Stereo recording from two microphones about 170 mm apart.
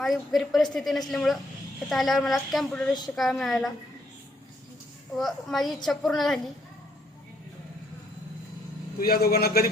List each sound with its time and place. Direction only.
0.0 s a woman's voice: centre (ahead or behind)
5.1 s a woman's voice: centre (ahead or behind)
9.0 s a man's voice: 65° left (ahead or behind)